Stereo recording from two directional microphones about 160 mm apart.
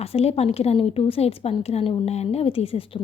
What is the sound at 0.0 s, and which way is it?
A woman's voice, 40° left (ahead or behind).